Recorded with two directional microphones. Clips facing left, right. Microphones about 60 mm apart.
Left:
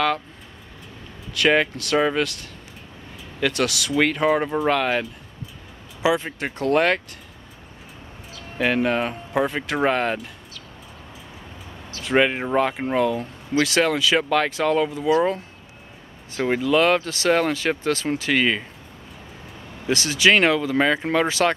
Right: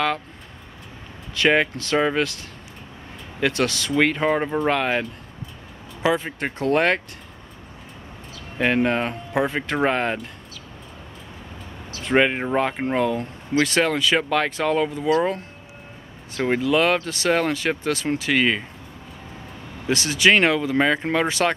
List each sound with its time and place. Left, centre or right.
1.4 s speech: centre
3.3 s speech: centre
4.6 s speech: centre
6.0 s speech: centre
6.6 s speech: centre
8.5 s speech: centre
12.0 s speech: centre
14.9 s speech: centre
16.4 s speech: centre
17.9 s speech: centre
18.3 s speech: centre
19.9 s speech: right
20.3 s speech: centre